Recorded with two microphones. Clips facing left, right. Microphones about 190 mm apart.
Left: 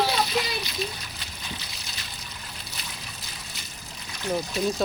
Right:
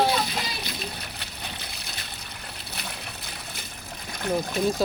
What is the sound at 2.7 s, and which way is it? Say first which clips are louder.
Boat: right 4 dB; 60° right (ahead or behind).